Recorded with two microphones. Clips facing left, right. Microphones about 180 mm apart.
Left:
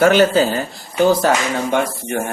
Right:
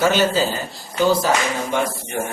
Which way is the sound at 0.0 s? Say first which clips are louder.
Left 5 dB; 55° left (ahead or behind).